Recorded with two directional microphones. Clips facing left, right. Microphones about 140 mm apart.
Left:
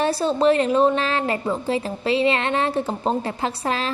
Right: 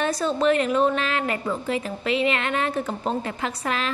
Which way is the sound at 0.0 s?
30° left (ahead or behind).